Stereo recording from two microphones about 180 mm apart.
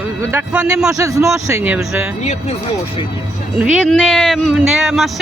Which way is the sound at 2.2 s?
40° left (ahead or behind).